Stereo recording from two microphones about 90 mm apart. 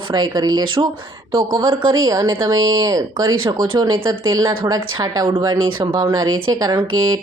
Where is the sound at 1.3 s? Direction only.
40° right (ahead or behind).